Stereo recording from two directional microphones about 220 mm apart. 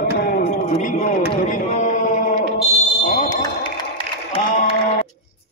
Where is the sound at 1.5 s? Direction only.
35° left (ahead or behind).